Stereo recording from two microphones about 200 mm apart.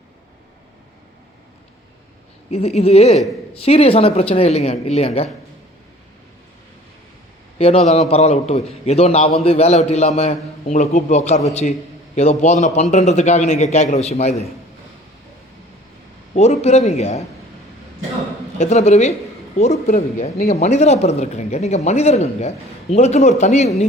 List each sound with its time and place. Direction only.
2.5 s a man's voice: 30° left (ahead or behind)
7.6 s a man's voice: 30° left (ahead or behind)
16.3 s a man's voice: 35° left (ahead or behind)
18.6 s a man's voice: 35° left (ahead or behind)